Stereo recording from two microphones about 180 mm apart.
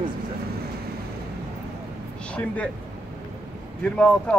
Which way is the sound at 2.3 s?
5° left (ahead or behind).